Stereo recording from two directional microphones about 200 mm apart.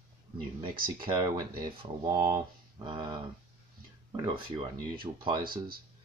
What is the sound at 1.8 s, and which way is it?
Speech, 25° right (ahead or behind).